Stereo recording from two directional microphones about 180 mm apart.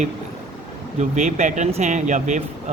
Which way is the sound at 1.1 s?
40° right (ahead or behind).